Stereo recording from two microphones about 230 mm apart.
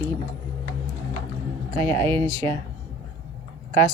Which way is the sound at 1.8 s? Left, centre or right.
Centre.